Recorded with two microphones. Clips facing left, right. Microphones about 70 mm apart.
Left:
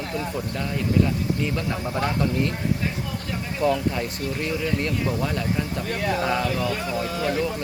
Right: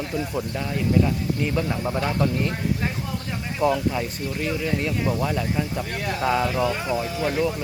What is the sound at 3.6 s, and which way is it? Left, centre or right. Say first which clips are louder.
Speech: right 1 dB; centre.